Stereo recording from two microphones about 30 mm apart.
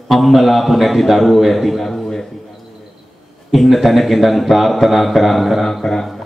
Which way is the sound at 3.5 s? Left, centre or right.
Centre.